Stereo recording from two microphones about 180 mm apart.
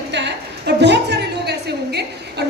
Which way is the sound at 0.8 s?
70° right (ahead or behind).